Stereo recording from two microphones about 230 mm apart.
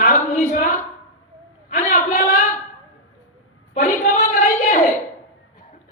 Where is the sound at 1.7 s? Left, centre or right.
Left.